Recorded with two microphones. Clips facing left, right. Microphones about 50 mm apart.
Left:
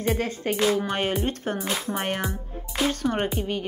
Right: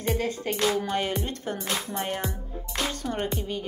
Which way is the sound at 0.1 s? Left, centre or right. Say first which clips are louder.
Even; left.